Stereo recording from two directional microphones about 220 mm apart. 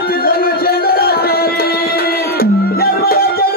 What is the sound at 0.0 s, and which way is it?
Music, 45° left (ahead or behind).